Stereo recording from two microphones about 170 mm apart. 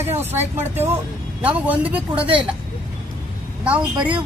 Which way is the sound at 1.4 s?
10° right (ahead or behind).